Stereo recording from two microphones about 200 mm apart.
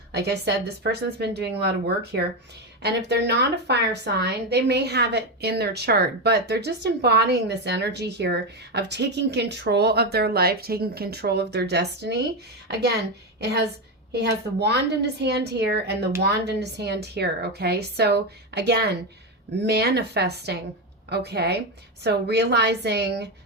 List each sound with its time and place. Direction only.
0.1 s a woman's voice: 55° right (ahead or behind)
2.8 s a woman's voice: 55° right (ahead or behind)